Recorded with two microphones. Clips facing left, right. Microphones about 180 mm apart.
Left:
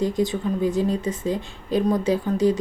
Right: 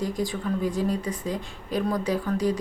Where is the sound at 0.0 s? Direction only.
25° left (ahead or behind).